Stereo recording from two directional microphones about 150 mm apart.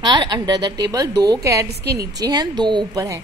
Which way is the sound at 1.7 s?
90° right.